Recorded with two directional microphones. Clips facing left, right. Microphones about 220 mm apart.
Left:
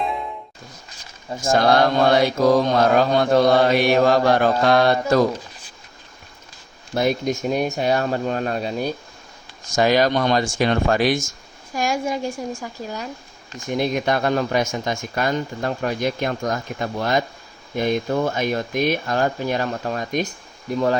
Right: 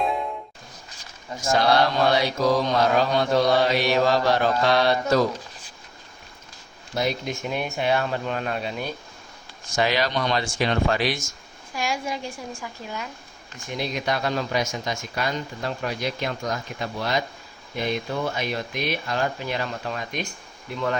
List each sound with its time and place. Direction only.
1.5 s mantra: 50° left (ahead or behind)
6.9 s speech: 50° left (ahead or behind)
9.6 s mantra: 45° left (ahead or behind)
13.7 s mantra: 50° left (ahead or behind)
20.7 s speech: 40° left (ahead or behind)